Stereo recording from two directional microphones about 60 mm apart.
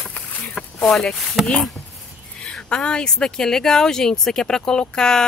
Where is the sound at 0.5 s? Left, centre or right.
Centre.